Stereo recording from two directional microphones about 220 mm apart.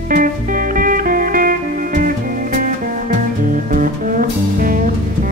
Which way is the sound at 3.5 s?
35° right (ahead or behind).